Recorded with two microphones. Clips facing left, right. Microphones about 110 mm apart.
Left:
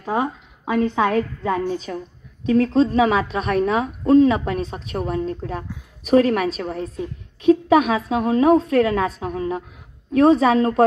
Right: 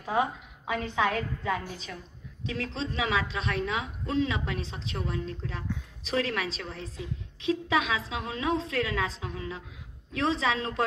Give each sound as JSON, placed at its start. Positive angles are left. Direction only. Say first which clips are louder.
{"t": 0.0, "sound": "a woman's voice", "louder": "left 5 dB", "side_deg": 40}